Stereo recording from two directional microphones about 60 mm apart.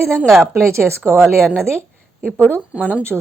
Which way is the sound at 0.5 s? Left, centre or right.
Right.